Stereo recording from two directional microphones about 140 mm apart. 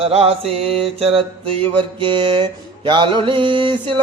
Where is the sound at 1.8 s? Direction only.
35° right (ahead or behind).